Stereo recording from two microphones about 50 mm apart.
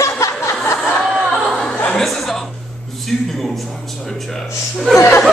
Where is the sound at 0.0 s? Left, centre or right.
Left.